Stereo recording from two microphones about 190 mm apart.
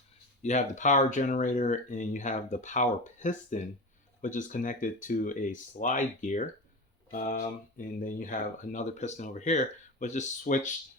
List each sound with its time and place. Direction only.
0.4 s speech: 40° left (ahead or behind)